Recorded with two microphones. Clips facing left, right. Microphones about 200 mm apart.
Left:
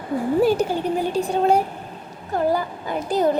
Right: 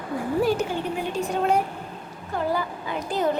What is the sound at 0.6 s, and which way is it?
A child's voice, 40° left (ahead or behind).